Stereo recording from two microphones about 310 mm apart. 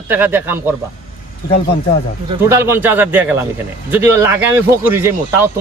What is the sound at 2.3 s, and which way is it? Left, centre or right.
A man's voice, centre.